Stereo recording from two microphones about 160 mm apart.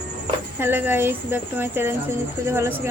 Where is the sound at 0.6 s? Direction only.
15° right (ahead or behind).